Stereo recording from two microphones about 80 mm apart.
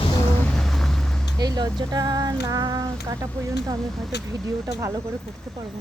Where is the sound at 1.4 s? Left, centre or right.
Right.